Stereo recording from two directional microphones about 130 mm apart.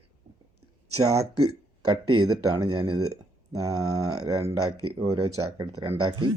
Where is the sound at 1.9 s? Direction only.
30° right (ahead or behind).